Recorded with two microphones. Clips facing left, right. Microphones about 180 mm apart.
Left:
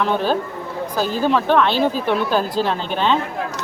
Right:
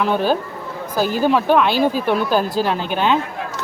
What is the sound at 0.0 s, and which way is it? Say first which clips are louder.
Speech: right 1 dB; 5° right (ahead or behind).